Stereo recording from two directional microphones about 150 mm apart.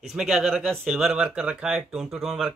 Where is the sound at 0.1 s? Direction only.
5° right (ahead or behind).